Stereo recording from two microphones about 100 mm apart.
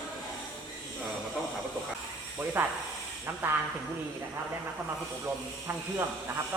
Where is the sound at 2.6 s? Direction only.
20° right (ahead or behind).